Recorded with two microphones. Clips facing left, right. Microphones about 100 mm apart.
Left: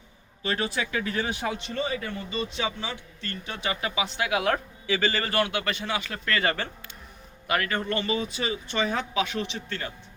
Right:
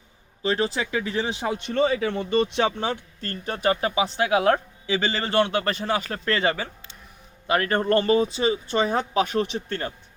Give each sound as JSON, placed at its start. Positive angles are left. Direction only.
{"t": 0.4, "sound": "speech", "side_deg": -25}
{"t": 1.7, "sound": "speech", "side_deg": -80}
{"t": 7.7, "sound": "speech", "side_deg": -45}